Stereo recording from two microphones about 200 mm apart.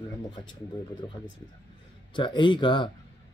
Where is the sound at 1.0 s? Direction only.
20° left (ahead or behind).